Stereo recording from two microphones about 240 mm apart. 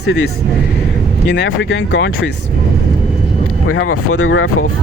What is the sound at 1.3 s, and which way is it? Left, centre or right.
Speech, left.